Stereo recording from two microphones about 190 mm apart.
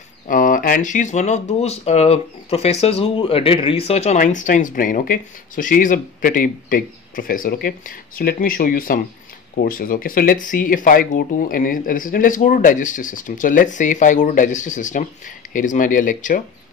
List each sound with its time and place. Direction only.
0.3 s speech: 45° left (ahead or behind)